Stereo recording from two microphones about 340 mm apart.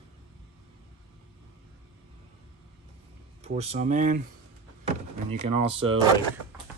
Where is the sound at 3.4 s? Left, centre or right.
Centre.